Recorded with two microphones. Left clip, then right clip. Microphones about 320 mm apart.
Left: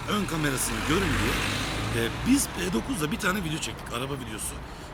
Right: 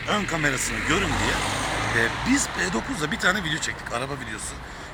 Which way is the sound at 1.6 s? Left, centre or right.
Centre.